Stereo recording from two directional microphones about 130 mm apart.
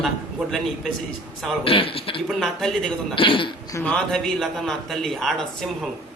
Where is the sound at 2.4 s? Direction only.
5° left (ahead or behind).